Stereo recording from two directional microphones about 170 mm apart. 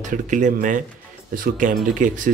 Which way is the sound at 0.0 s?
50° right (ahead or behind).